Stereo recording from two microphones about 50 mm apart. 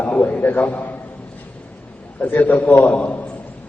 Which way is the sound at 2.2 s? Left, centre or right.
Left.